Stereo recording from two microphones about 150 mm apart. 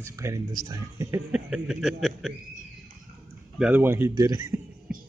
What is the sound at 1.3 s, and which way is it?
Speech, 5° right (ahead or behind).